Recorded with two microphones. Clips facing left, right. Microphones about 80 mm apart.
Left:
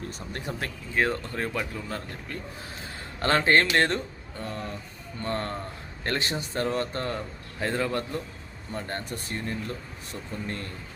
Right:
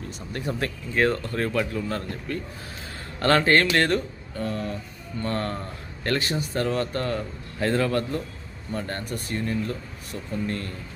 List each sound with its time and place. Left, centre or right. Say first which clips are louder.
0.9 s speech: right 3 dB; centre